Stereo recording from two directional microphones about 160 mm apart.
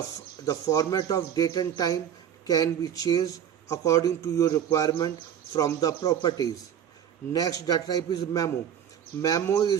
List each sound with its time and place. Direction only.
0.4 s a man's voice: 20° left (ahead or behind)